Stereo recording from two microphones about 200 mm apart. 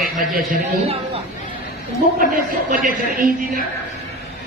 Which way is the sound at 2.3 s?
40° right (ahead or behind).